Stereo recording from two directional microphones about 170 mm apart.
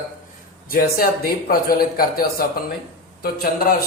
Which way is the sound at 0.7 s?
60° left (ahead or behind).